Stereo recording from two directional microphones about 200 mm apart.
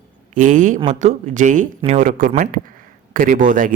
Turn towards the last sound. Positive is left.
turn(degrees=-40)  # may be behind; listen again after turning